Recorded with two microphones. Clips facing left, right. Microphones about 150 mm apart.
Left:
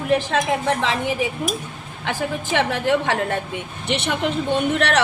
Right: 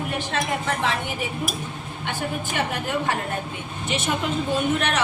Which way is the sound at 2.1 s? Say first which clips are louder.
Left 5 dB; 90° left.